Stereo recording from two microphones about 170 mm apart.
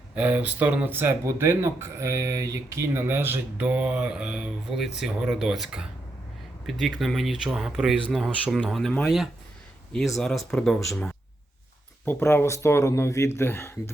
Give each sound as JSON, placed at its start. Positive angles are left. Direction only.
{"t": 0.2, "sound": "speech", "side_deg": -10}
{"t": 12.0, "sound": "speech", "side_deg": 15}